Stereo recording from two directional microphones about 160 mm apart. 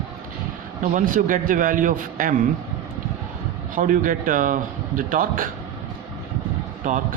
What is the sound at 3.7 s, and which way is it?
A man's voice, 55° right (ahead or behind).